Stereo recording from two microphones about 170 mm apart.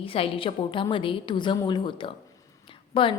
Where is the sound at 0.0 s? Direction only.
35° left (ahead or behind).